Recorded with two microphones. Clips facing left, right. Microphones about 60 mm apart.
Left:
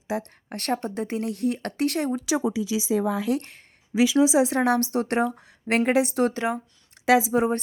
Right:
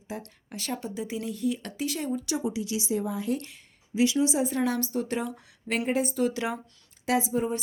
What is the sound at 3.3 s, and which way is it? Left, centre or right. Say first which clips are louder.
Speech: left 4 dB; left.